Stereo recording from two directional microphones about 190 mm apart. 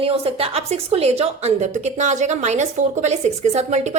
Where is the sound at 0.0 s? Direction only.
30° right (ahead or behind).